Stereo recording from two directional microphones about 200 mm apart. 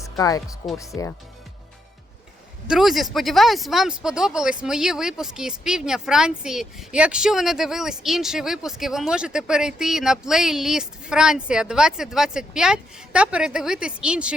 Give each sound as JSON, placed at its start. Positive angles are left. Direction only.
{"t": 0.0, "sound": "speech", "side_deg": 15}
{"t": 2.6, "sound": "speech", "side_deg": 0}